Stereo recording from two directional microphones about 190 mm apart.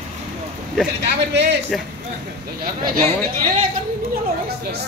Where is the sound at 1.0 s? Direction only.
65° right (ahead or behind).